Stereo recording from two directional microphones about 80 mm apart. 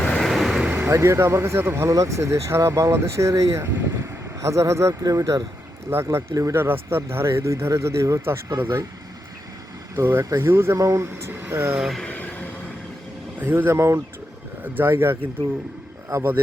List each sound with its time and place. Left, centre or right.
0.0 s vehicle: centre
0.3 s vehicle: centre
0.7 s a sound: right
0.9 s speech: right
6.6 s speech: right
9.9 s speech: right
11.8 s speech: centre
12.0 s a sound: centre
13.4 s speech: right